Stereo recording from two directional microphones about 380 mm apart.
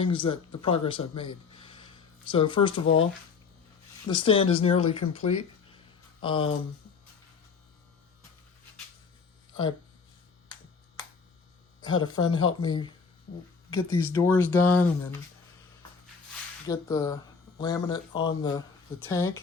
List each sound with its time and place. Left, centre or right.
0.0 s speech: centre
2.8 s speech: left
4.0 s speech: centre
11.8 s speech: centre
16.6 s speech: centre